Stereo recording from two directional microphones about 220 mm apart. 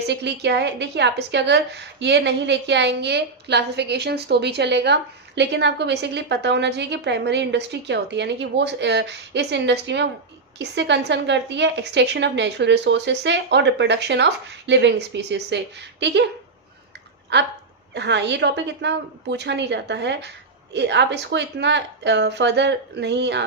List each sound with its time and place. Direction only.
0.1 s a woman's voice: 50° right (ahead or behind)
17.3 s a woman's voice: 50° right (ahead or behind)